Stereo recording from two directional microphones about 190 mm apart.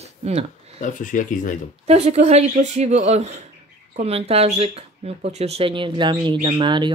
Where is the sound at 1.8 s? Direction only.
35° right (ahead or behind).